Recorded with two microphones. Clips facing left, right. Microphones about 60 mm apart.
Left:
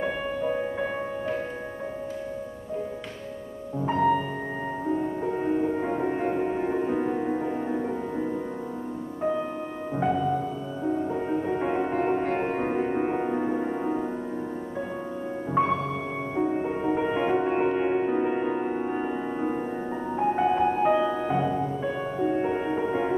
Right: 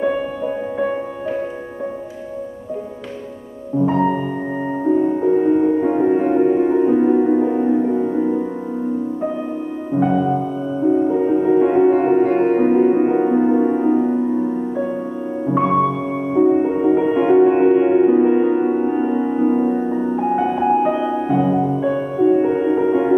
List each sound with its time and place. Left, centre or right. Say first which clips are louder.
0.7 s music: right 8 dB; centre
3.9 s music: right 5 dB; centre
10.1 s music: right 8 dB; centre
11.2 s music: right 13 dB; centre
15.4 s music: right 9 dB; centre